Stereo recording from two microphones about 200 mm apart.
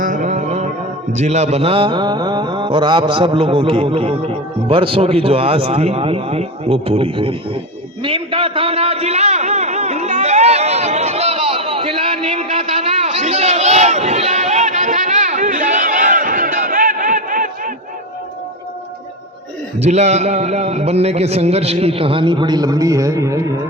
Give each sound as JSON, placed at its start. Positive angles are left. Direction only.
{"t": 0.0, "sound": "carnatic music", "side_deg": -40}
{"t": 1.1, "sound": "speech", "side_deg": -35}
{"t": 8.0, "sound": "a sound", "side_deg": -25}
{"t": 19.8, "sound": "a man's voice", "side_deg": -35}